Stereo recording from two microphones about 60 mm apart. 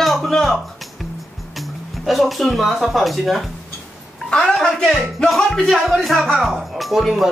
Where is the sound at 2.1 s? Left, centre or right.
Centre.